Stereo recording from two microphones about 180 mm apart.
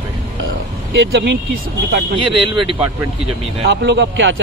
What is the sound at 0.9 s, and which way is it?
Speech, 75° right (ahead or behind).